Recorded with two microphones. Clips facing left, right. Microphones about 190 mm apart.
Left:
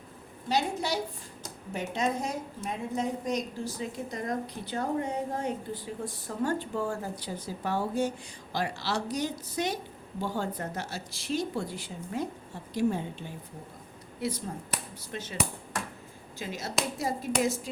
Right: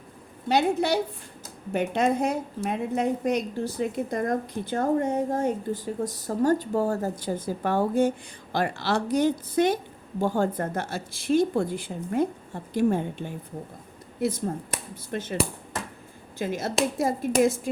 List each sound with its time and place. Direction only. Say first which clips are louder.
0.4 s a woman's voice: right 7 dB; 60° right (ahead or behind)
16.4 s a woman's voice: right 7 dB; 50° right (ahead or behind)